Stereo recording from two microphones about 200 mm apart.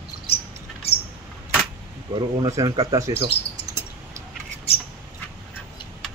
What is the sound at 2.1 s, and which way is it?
Speech, 20° right (ahead or behind).